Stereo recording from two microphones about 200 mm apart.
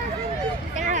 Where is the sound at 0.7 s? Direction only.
40° right (ahead or behind).